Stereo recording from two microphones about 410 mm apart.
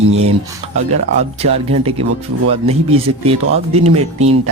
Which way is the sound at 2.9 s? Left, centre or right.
Centre.